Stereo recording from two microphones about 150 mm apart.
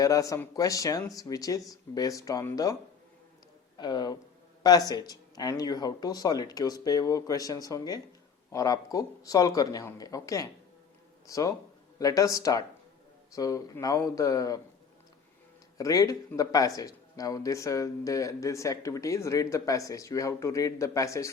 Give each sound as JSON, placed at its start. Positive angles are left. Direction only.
{"t": 0.0, "sound": "speech", "side_deg": 20}
{"t": 3.8, "sound": "speech", "side_deg": 30}
{"t": 15.8, "sound": "speech", "side_deg": 25}